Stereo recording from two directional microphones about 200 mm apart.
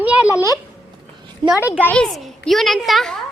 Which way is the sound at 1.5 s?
10° right (ahead or behind).